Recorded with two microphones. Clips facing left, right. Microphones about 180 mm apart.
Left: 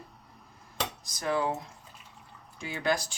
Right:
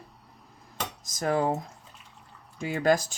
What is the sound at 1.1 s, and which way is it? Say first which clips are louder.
Speech: right 4 dB; 45° right (ahead or behind).